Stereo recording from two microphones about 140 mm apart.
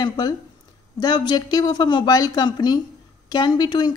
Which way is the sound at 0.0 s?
30° left (ahead or behind).